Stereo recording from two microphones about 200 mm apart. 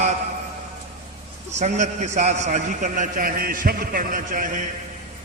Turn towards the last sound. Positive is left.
turn(degrees=-40)  # may be behind; listen again after turning